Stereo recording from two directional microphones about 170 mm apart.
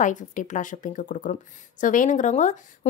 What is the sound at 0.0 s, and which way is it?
A woman's voice, 45° left (ahead or behind).